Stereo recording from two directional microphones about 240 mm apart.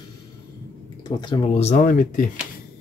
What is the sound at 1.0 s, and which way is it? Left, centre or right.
Speech, centre.